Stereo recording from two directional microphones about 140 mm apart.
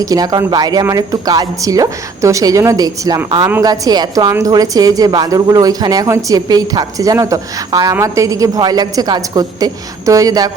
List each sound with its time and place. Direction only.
0.0 s a woman's voice: 25° right (ahead or behind)